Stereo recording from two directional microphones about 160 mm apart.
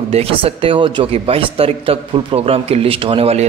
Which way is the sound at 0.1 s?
35° right (ahead or behind).